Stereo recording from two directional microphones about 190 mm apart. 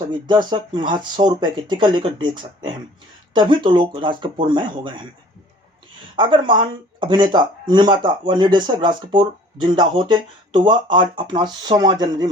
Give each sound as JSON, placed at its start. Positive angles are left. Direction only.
{"t": 0.1, "sound": "speech", "side_deg": -25}
{"t": 6.1, "sound": "speech", "side_deg": -25}